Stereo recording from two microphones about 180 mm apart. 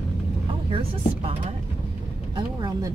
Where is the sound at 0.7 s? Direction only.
30° right (ahead or behind).